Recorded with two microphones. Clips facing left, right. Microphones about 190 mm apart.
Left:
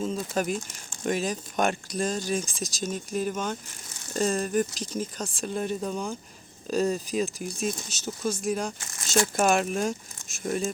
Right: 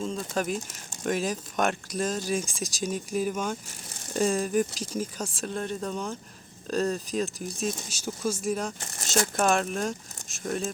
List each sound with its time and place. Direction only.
0.0 s speech: 5° left (ahead or behind)
8.8 s speech: 40° right (ahead or behind)
9.3 s speech: 5° left (ahead or behind)